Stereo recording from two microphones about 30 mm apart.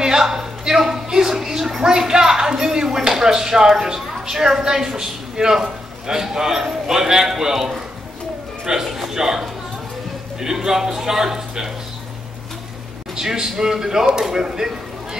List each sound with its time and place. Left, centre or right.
0.0 s a man's voice: centre
8.8 s a man's voice: centre
13.1 s a man's voice: centre